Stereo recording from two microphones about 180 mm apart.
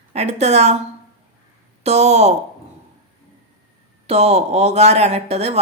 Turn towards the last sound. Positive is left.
turn(degrees=-35)  # may be behind; listen again after turning